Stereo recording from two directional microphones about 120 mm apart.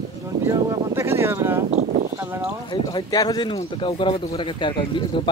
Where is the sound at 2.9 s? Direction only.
30° left (ahead or behind).